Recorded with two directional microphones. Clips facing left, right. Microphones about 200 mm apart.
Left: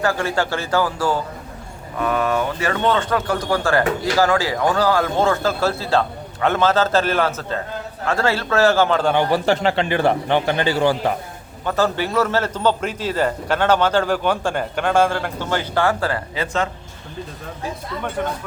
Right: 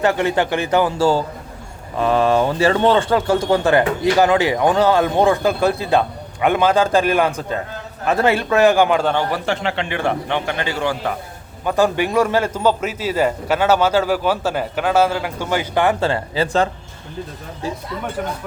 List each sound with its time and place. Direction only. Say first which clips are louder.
0.0 s a man's voice: right 3 dB; 20° right (ahead or behind)
9.3 s a man's voice: left 4 dB; 35° left (ahead or behind)
11.6 s a man's voice: right 3 dB; 15° right (ahead or behind); by 16.6 s 35° right (ahead or behind)